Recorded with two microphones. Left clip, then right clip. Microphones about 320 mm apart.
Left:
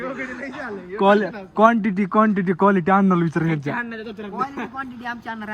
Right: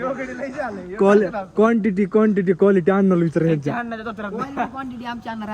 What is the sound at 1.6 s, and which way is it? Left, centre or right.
Speech, centre.